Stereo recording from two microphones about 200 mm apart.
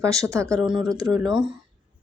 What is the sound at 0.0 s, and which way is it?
Speech, 15° right (ahead or behind).